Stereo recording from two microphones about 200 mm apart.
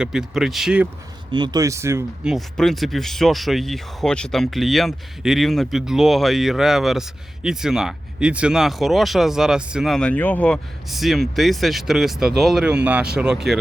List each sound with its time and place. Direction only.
0.0 s speech: 5° right (ahead or behind)
1.3 s speech: 20° right (ahead or behind)
2.3 s speech: centre (ahead or behind)